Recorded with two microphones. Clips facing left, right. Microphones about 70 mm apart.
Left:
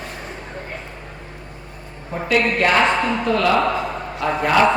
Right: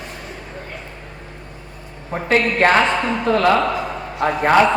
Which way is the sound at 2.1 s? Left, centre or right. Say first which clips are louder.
Right 1 dB; right.